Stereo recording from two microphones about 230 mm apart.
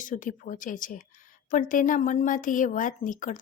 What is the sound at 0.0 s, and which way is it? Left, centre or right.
A woman's voice, left.